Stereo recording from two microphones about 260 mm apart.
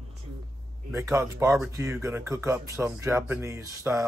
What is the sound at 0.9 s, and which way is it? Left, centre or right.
Speech, centre.